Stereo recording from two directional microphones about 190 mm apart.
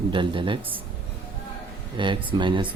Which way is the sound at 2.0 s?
25° right (ahead or behind).